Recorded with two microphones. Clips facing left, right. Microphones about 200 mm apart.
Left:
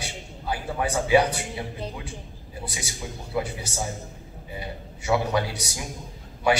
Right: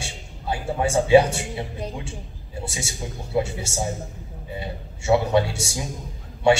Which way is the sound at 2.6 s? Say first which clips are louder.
Right 3 dB; 25° right (ahead or behind).